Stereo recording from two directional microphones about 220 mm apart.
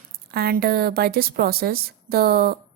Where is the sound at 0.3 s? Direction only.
45° right (ahead or behind).